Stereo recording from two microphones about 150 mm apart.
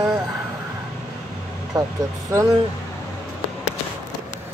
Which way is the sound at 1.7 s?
25° right (ahead or behind).